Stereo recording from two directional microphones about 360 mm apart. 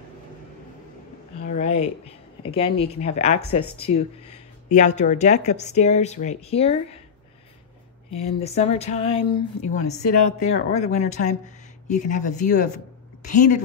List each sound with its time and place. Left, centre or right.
1.4 s a sound: centre
2.4 s speech: centre
8.1 s speech: centre
10.1 s speech: left
10.8 s speech: centre